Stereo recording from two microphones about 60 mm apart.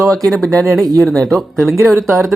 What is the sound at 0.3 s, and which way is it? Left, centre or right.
Speech, centre.